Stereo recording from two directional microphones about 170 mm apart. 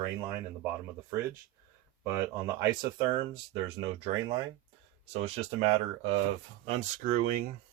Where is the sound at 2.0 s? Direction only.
20° right (ahead or behind); by 6.2 s 40° right (ahead or behind).